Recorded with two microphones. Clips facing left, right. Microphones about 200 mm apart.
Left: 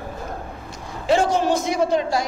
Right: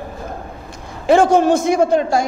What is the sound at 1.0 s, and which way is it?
A man's voice, 50° right (ahead or behind).